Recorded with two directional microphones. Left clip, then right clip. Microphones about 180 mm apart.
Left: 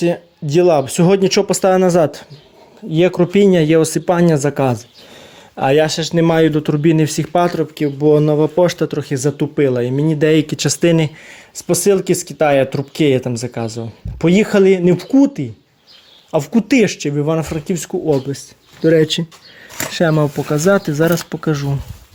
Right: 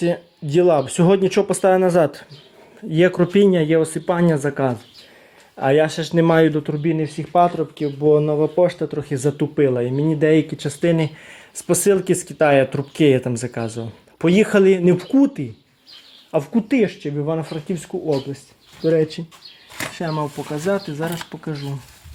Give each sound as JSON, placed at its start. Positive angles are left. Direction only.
{"t": 0.5, "sound": "speech", "side_deg": 15}
{"t": 2.9, "sound": "speech", "side_deg": 10}
{"t": 3.6, "sound": "speech", "side_deg": 35}
{"t": 5.8, "sound": "speech", "side_deg": 15}
{"t": 6.6, "sound": "speech", "side_deg": 40}
{"t": 7.5, "sound": "speech", "side_deg": 30}
{"t": 9.0, "sound": "speech", "side_deg": 15}
{"t": 10.4, "sound": "speech", "side_deg": 40}
{"t": 11.7, "sound": "speech", "side_deg": 5}
{"t": 13.2, "sound": "speech", "side_deg": 5}
{"t": 20.0, "sound": "speech", "side_deg": 60}
{"t": 20.3, "sound": "speech", "side_deg": 40}